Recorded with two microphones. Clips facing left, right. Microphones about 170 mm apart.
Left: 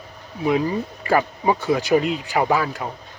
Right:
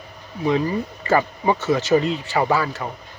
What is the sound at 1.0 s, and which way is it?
Speech, 10° left (ahead or behind).